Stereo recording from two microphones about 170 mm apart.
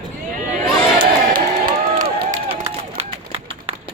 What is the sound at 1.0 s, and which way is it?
Crowd, 55° right (ahead or behind).